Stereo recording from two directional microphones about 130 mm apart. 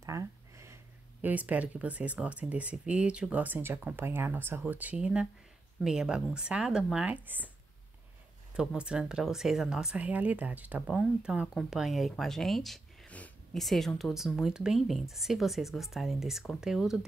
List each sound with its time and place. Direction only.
0.0 s a sound: 25° right (ahead or behind)
1.2 s speech: 10° right (ahead or behind)
8.5 s speech: 5° right (ahead or behind)